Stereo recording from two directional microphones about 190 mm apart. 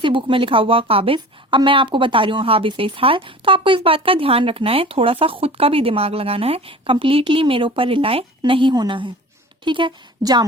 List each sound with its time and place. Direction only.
0.0 s a woman's voice: 25° right (ahead or behind)